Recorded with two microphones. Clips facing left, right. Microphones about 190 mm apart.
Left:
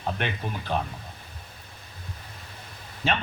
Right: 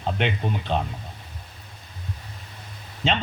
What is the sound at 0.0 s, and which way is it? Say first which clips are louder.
Speech: right 4 dB; 20° right (ahead or behind).